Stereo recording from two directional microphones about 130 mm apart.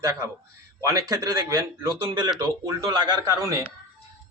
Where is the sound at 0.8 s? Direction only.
30° right (ahead or behind).